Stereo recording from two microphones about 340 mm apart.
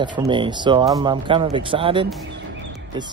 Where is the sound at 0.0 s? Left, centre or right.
Centre.